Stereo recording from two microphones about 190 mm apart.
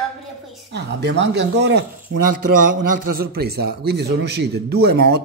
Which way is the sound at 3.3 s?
55° right (ahead or behind).